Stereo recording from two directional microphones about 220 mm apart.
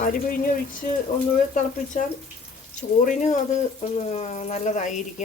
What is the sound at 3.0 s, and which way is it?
Speech, 30° left (ahead or behind).